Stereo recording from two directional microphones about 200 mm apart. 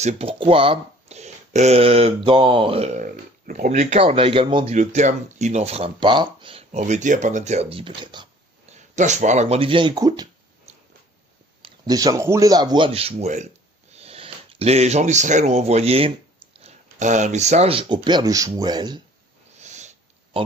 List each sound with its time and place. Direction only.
0.0 s speech: 30° right (ahead or behind)
8.6 s speech: 35° right (ahead or behind); by 10.2 s 20° right (ahead or behind)
11.6 s speech: 20° right (ahead or behind)
19.5 s sniff: 35° right (ahead or behind)